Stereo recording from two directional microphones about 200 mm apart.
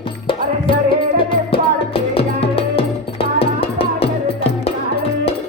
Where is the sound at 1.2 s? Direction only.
25° left (ahead or behind).